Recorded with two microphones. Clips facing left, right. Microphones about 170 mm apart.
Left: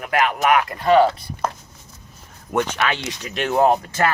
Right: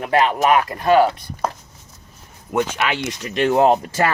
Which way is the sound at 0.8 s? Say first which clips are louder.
Left 1 dB; 10° right (ahead or behind).